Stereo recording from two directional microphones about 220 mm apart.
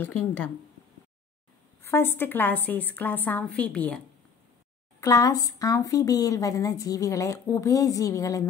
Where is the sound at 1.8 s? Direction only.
10° left (ahead or behind).